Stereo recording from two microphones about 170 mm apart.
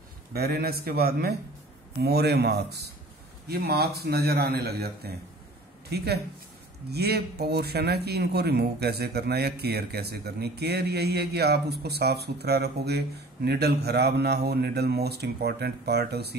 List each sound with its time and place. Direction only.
0.3 s a man's voice: 65° right (ahead or behind)